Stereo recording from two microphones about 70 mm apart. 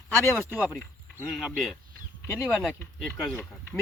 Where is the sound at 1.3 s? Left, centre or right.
Centre.